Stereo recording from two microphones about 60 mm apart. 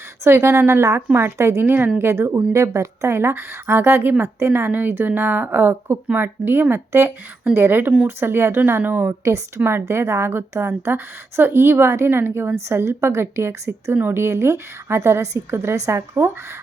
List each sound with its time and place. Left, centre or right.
0.3 s a woman's voice: right
3.2 s a woman's voice: right
9.0 s a woman's voice: right
13.9 s a woman's voice: right
14.2 s a woman's voice: right